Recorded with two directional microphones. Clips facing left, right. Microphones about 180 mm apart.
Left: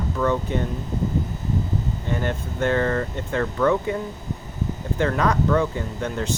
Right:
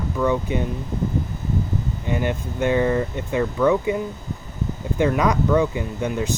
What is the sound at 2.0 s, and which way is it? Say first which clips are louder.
Speech: right 5 dB; 15° right (ahead or behind).